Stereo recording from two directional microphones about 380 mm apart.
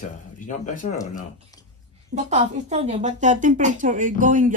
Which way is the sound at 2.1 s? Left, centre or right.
Centre.